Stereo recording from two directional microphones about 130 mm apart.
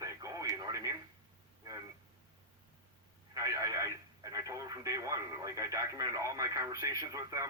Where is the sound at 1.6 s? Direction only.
30° right (ahead or behind).